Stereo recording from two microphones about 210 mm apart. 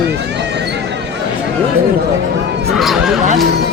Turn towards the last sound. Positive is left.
turn(degrees=0)  # may be behind; listen again after turning